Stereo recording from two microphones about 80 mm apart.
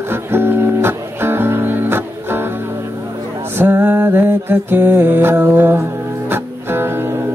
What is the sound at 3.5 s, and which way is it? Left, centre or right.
Music, right.